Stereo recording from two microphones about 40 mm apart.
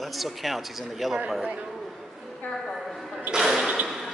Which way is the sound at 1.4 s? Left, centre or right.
Right.